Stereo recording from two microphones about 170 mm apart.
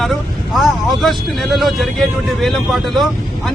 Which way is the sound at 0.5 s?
Centre (ahead or behind).